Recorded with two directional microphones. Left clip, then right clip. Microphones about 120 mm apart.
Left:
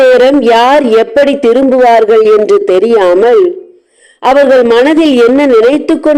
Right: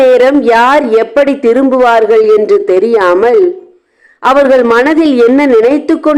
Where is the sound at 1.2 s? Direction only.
75° left (ahead or behind).